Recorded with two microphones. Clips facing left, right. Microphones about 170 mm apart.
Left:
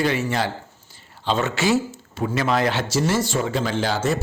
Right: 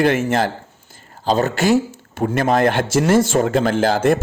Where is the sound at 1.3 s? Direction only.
40° right (ahead or behind).